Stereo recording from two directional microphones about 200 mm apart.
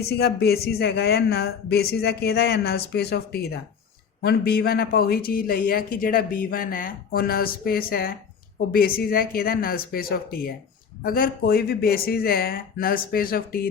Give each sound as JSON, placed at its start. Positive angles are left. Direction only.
{"t": 0.1, "sound": "speech", "side_deg": 55}